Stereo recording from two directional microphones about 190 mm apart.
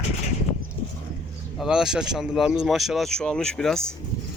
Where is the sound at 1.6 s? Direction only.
5° right (ahead or behind).